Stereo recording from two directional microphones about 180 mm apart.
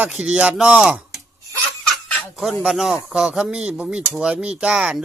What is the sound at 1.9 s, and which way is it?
Chicken, centre (ahead or behind).